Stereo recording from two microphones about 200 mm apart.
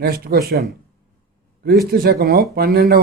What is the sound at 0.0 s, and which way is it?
Speech, 50° right (ahead or behind).